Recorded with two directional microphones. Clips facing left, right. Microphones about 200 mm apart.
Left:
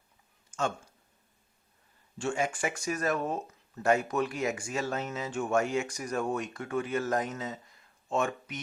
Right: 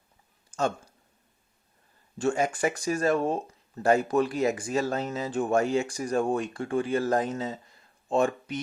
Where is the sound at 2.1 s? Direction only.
40° right (ahead or behind).